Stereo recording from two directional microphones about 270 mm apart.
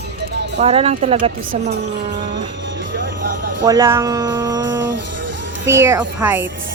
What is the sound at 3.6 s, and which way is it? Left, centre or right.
Speech, centre.